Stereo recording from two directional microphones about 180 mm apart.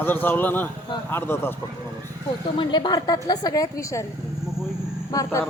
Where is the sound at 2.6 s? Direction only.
25° left (ahead or behind).